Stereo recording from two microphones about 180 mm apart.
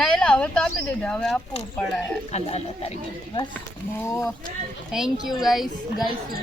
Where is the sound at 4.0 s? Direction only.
15° left (ahead or behind).